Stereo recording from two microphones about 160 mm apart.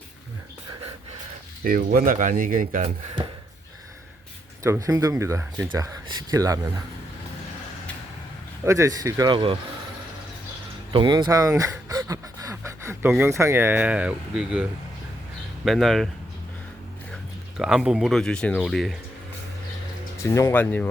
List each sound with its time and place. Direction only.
1.6 s speech: 65° right (ahead or behind)
4.6 s speech: 20° right (ahead or behind)
8.6 s speech: 20° right (ahead or behind)
10.9 s speech: 30° right (ahead or behind); by 16.0 s centre (ahead or behind)
17.6 s speech: 5° right (ahead or behind)
20.1 s speech: 15° left (ahead or behind)